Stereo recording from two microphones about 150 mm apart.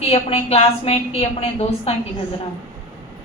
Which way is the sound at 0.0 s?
40° left (ahead or behind).